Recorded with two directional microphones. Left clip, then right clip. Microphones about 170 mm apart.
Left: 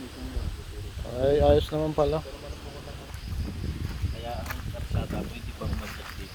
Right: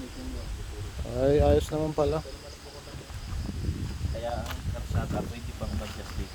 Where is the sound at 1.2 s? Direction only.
25° right (ahead or behind).